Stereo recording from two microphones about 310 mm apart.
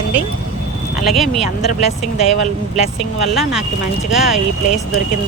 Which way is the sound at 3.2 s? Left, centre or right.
Centre.